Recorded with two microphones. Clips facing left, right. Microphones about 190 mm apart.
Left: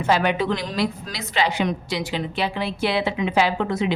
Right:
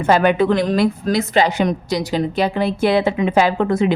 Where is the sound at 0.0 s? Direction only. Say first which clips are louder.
Right 6 dB; 50° right (ahead or behind).